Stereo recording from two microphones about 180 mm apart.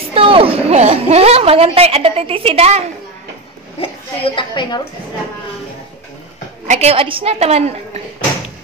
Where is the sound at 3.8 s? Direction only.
30° left (ahead or behind).